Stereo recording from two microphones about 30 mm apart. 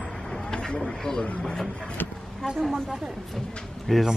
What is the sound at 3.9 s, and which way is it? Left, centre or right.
Speech, centre.